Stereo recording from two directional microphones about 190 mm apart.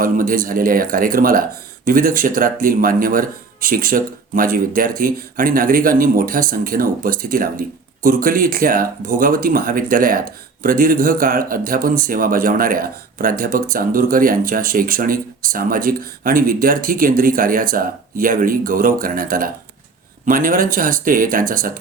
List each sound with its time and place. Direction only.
0.0 s speech: 45° right (ahead or behind)